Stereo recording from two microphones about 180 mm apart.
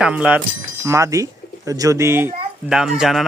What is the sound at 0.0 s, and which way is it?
Speech, 5° right (ahead or behind).